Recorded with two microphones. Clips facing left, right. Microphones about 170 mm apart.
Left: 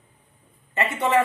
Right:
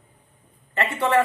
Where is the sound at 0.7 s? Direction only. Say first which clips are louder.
Even; 20° left (ahead or behind).